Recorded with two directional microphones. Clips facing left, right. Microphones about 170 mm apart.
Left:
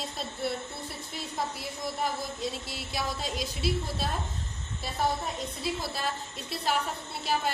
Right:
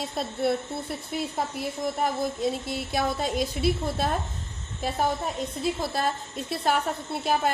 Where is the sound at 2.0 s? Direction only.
50° right (ahead or behind).